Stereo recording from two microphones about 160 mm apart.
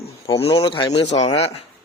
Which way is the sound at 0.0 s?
35° left (ahead or behind).